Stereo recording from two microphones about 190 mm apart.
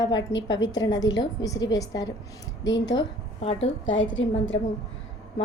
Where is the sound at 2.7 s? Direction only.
75° left (ahead or behind).